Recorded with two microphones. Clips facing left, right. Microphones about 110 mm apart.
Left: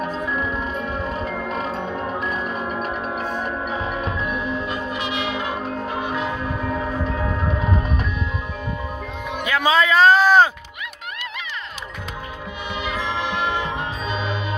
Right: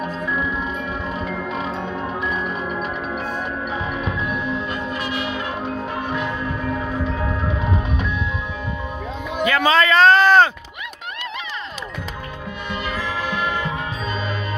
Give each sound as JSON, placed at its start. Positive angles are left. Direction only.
{"t": 0.0, "sound": "music", "side_deg": 0}
{"t": 1.0, "sound": "music", "side_deg": 40}
{"t": 2.0, "sound": "music", "side_deg": 5}
{"t": 4.6, "sound": "music", "side_deg": 25}
{"t": 9.4, "sound": "a sound", "side_deg": 5}
{"t": 12.8, "sound": "music", "side_deg": 20}